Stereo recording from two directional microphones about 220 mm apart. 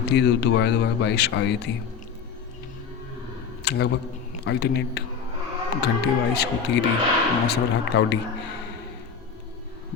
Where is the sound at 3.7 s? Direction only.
50° left (ahead or behind).